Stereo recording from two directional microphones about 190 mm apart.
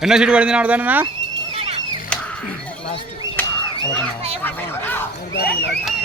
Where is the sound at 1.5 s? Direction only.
30° right (ahead or behind).